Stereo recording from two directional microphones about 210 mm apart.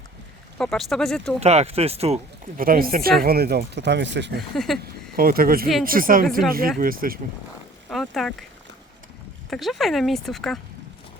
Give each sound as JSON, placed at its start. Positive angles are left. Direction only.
{"t": 0.6, "sound": "speech", "side_deg": 0}
{"t": 1.4, "sound": "speech", "side_deg": -30}
{"t": 2.6, "sound": "speech", "side_deg": -45}
{"t": 4.5, "sound": "speech", "side_deg": 0}
{"t": 5.1, "sound": "speech", "side_deg": -45}
{"t": 7.9, "sound": "speech", "side_deg": 0}
{"t": 9.5, "sound": "speech", "side_deg": 0}